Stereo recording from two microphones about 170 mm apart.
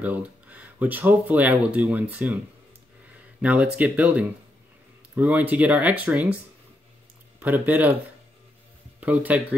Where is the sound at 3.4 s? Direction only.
10° right (ahead or behind).